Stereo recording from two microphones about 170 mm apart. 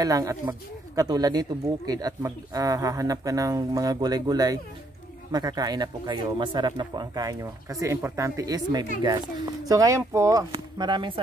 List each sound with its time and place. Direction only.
0.0 s speech: 20° right (ahead or behind)